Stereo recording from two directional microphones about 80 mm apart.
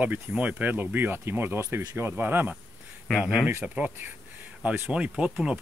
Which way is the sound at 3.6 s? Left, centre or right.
Centre.